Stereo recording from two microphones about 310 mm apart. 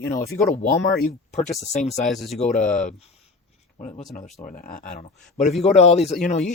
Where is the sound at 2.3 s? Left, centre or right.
Left.